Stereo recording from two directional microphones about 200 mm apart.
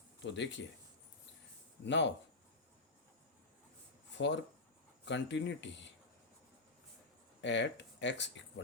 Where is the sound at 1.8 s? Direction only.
60° left (ahead or behind).